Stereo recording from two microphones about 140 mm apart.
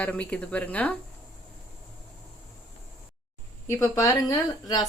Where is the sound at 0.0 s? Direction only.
10° left (ahead or behind).